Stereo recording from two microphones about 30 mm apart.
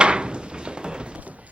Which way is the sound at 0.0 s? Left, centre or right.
Right.